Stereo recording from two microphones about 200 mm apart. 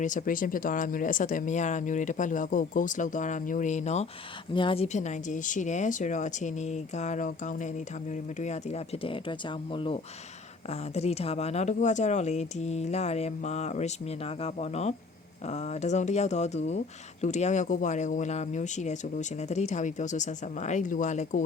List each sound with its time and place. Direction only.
0.0 s speech: 40° left (ahead or behind)